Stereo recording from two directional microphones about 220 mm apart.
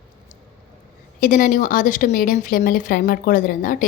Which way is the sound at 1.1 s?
40° left (ahead or behind).